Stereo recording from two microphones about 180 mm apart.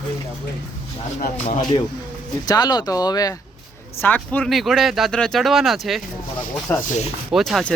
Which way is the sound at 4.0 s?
10° left (ahead or behind).